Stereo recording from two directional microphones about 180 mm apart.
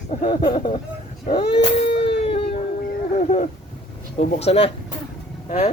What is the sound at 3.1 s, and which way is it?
Speech, 45° left (ahead or behind).